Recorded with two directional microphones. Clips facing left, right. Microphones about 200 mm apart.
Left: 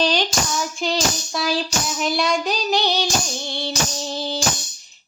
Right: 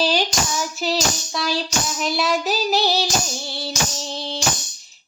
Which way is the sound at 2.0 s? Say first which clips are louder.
Even; centre (ahead or behind).